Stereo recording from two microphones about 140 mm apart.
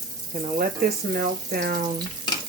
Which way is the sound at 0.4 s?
85° right.